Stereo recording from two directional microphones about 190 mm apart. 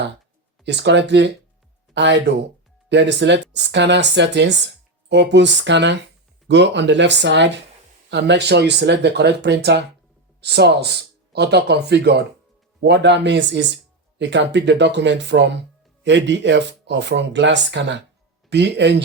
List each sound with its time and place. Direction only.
0.6 s speech: 65° right (ahead or behind)